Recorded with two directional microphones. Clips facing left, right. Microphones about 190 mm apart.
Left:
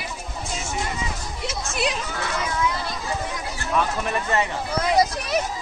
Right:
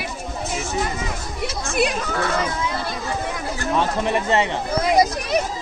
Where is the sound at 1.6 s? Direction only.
55° right (ahead or behind).